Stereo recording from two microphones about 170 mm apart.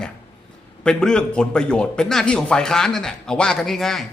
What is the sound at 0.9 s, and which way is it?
A man's voice, 5° left (ahead or behind).